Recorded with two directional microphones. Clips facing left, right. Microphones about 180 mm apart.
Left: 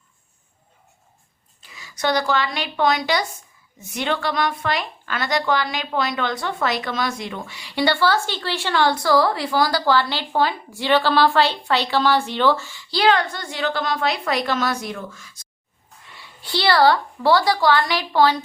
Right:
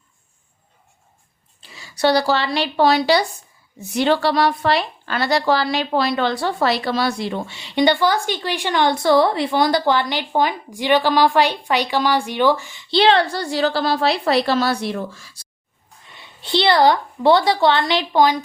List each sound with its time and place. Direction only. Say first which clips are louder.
1.6 s a woman's voice: right 5 dB; 30° right (ahead or behind)
16.0 s a woman's voice: right 6 dB; 20° right (ahead or behind)